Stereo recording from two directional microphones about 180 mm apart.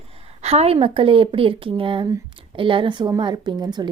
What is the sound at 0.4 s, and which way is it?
A woman's voice, 35° right (ahead or behind).